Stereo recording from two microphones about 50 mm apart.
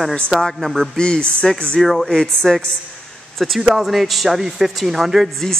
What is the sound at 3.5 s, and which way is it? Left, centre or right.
Speech, centre.